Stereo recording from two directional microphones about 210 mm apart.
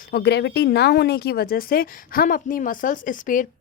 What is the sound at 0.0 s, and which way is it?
Speech, 50° left (ahead or behind).